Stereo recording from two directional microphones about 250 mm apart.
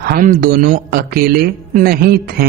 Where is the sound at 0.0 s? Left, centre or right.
Right.